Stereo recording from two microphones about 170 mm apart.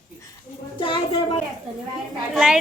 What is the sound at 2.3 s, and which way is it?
Speech, 5° right (ahead or behind).